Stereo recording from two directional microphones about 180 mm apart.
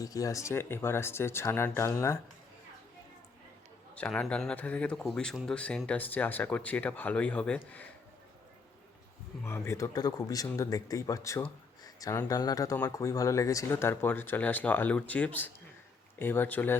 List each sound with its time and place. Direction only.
0.0 s speech: 20° left (ahead or behind)
3.9 s speech: 5° left (ahead or behind)
9.4 s speech: 15° left (ahead or behind)